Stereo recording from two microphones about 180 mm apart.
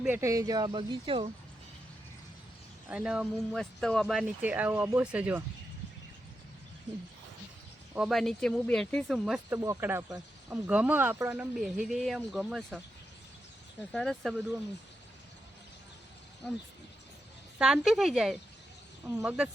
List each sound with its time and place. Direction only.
0.0 s speech: 10° right (ahead or behind); by 1.3 s 30° right (ahead or behind)
2.9 s speech: 5° right (ahead or behind)
7.9 s speech: centre (ahead or behind)
9.5 s speech: 15° right (ahead or behind)
13.9 s speech: centre (ahead or behind)
17.6 s speech: centre (ahead or behind)